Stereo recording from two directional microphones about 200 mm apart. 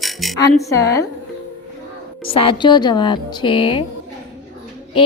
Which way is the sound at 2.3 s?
25° left (ahead or behind).